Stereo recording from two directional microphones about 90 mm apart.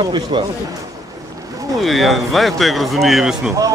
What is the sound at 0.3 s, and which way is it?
Speech, 75° right (ahead or behind).